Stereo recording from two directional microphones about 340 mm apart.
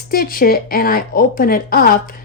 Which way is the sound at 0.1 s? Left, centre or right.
Left.